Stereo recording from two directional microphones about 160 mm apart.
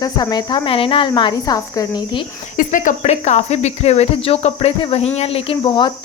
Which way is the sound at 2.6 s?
55° left (ahead or behind).